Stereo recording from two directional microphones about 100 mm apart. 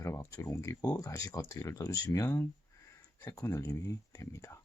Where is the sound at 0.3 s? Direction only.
35° left (ahead or behind).